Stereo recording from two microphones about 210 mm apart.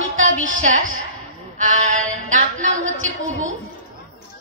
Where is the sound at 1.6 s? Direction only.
35° right (ahead or behind).